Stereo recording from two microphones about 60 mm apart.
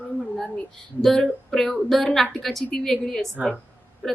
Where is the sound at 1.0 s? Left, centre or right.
Centre.